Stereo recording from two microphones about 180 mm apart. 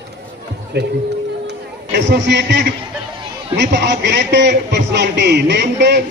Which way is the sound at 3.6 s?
75° right (ahead or behind).